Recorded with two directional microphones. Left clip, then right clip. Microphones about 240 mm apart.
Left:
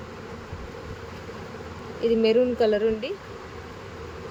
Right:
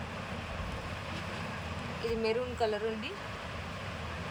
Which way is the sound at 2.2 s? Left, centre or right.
Left.